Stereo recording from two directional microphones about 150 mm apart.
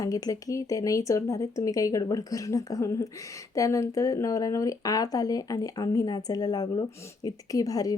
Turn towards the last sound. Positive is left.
turn(degrees=25)  # may be behind; listen again after turning